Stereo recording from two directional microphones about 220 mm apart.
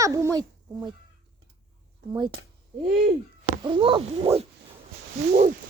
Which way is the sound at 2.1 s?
20° right (ahead or behind).